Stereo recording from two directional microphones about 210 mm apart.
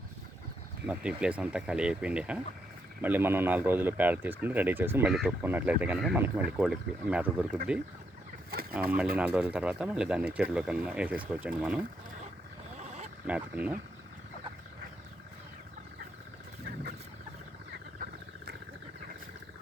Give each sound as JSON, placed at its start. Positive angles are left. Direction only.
{"t": 0.9, "sound": "speech", "side_deg": -5}
{"t": 8.7, "sound": "speech", "side_deg": -5}
{"t": 12.8, "sound": "a sound", "side_deg": -30}
{"t": 13.2, "sound": "speech", "side_deg": -5}